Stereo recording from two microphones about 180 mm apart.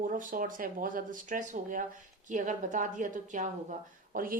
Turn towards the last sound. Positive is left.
turn(degrees=-50)  # may be behind; listen again after turning